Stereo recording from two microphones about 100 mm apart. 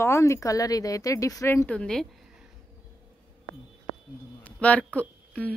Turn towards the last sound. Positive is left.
turn(degrees=15)  # may be behind; listen again after turning